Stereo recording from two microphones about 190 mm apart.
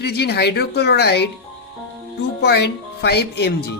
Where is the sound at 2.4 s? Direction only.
60° left (ahead or behind).